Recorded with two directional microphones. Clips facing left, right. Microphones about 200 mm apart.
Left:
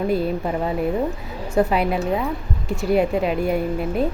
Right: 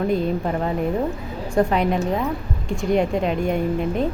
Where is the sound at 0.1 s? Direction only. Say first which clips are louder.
Even; 5° left (ahead or behind).